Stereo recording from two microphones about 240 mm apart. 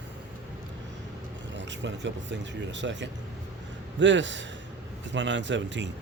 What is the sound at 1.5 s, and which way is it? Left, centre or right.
Speech, right.